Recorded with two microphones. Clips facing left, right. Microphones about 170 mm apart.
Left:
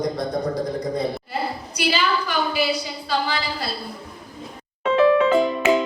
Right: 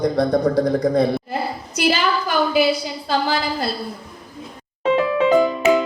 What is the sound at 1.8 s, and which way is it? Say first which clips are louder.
A woman's voice: right 3 dB; 50° right (ahead or behind).